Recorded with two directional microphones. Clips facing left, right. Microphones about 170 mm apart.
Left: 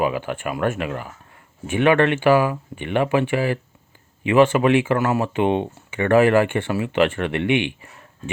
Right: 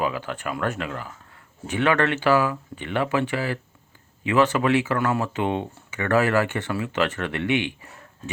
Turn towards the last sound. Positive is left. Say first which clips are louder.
# left 4 dB
turn(degrees=20)  # may be behind; listen again after turning